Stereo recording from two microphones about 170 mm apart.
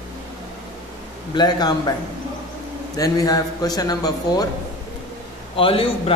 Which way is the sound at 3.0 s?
20° left (ahead or behind).